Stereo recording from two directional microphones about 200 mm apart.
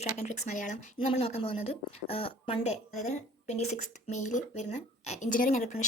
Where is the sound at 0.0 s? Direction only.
35° left (ahead or behind).